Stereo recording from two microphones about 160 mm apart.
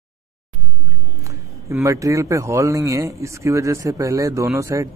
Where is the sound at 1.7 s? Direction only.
20° right (ahead or behind).